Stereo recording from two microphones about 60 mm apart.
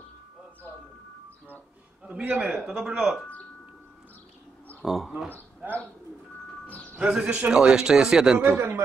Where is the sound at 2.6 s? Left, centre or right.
Centre.